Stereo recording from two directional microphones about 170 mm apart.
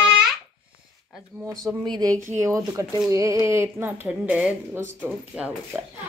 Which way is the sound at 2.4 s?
20° right (ahead or behind).